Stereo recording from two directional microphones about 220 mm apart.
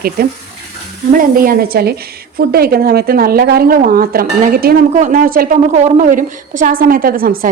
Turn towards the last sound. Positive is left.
turn(degrees=-40)  # may be behind; listen again after turning